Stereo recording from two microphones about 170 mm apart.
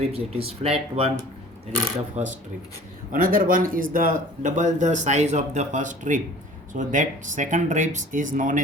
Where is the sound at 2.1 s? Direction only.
45° right (ahead or behind).